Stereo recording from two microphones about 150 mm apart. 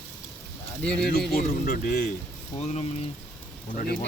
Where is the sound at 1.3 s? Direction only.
90° left.